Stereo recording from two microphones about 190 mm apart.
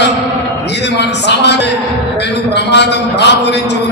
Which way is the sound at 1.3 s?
60° left (ahead or behind).